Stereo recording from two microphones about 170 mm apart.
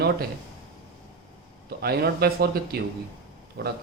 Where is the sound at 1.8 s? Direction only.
65° right (ahead or behind).